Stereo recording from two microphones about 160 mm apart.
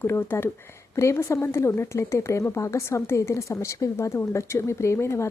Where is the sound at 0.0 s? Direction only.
15° left (ahead or behind).